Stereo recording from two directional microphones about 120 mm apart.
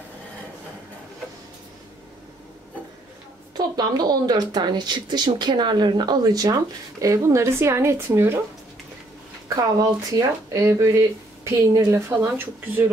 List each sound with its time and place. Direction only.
3.5 s speech: 35° right (ahead or behind)
9.6 s speech: 30° right (ahead or behind)